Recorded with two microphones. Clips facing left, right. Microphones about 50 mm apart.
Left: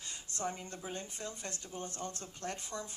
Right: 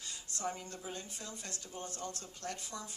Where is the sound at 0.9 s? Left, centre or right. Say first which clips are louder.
Left 3 dB; left.